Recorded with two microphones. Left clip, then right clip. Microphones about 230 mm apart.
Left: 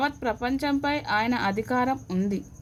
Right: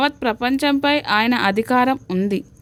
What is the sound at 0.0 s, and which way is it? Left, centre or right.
A woman's voice, right.